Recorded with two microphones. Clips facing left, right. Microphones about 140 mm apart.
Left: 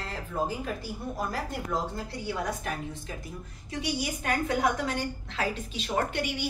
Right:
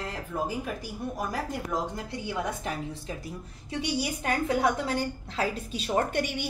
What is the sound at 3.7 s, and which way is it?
A woman's voice, 30° right (ahead or behind).